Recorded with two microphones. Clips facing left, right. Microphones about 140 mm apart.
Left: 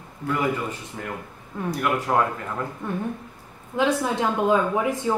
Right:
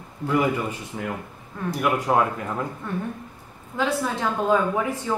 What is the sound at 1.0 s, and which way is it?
Speech, 5° right (ahead or behind).